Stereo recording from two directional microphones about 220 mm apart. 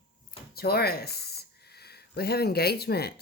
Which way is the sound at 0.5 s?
45° left (ahead or behind).